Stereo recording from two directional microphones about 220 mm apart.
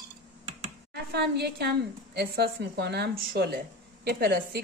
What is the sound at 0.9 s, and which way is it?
A woman's voice, 50° right (ahead or behind).